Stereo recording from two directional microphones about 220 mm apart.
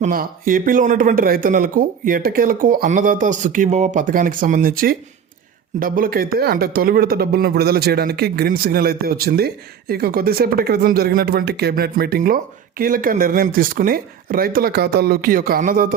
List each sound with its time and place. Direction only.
0.0 s speech: 40° right (ahead or behind)